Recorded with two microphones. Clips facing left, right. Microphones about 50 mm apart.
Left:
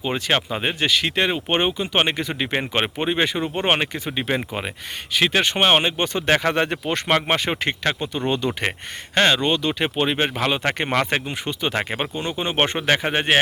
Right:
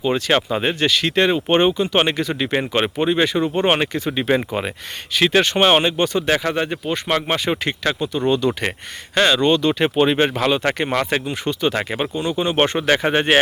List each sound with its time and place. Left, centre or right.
0.0 s speech: centre
4.4 s speech: centre; by 6.2 s left
6.2 s speech: left
7.1 s speech: left
7.5 s speech: left
9.4 s speech: centre
10.3 s speech: centre
11.4 s speech: centre
13.0 s speech: centre